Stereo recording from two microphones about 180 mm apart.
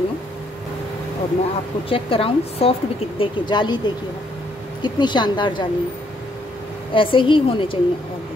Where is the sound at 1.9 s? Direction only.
30° left (ahead or behind).